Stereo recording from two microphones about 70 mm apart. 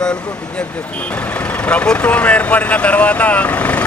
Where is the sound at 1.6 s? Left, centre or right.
Centre.